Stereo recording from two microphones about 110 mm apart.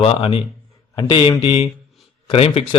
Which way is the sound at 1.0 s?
45° left (ahead or behind).